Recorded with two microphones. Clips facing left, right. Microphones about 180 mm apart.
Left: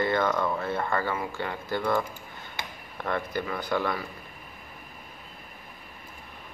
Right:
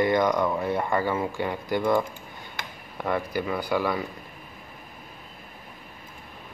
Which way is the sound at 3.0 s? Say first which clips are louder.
Right 3 dB; 10° right (ahead or behind).